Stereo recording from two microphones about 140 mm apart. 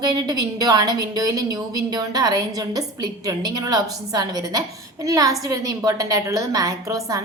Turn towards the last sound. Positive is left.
turn(degrees=-25)  # may be behind; listen again after turning